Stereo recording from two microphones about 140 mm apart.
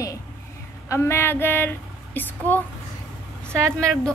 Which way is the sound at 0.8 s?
20° left (ahead or behind).